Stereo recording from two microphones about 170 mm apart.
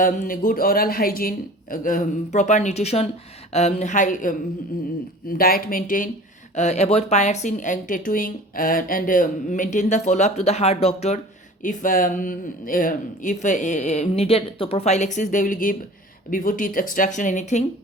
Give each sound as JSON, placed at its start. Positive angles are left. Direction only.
{"t": 0.0, "sound": "speech", "side_deg": 55}
{"t": 6.5, "sound": "speech", "side_deg": 40}
{"t": 11.6, "sound": "speech", "side_deg": 50}